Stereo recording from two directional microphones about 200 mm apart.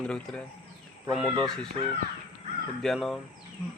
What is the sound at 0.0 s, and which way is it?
Speech, 5° left (ahead or behind).